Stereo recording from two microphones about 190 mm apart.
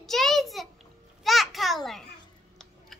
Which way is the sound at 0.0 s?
Centre (ahead or behind).